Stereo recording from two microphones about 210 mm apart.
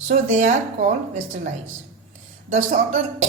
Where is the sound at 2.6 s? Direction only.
40° right (ahead or behind).